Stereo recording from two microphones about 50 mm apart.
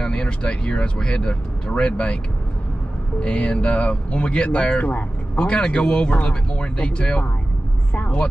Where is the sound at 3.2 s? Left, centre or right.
Left.